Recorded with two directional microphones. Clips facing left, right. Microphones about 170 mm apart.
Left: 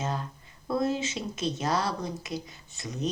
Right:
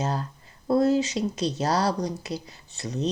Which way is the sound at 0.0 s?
35° right (ahead or behind).